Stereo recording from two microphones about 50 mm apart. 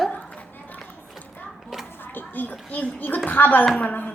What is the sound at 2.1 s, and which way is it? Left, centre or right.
A woman's voice, left.